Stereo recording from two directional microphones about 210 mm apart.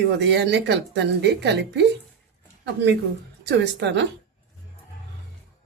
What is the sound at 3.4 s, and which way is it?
Speech, 55° right (ahead or behind).